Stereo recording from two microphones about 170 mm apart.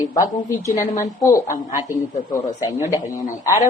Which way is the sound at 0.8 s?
20° left (ahead or behind).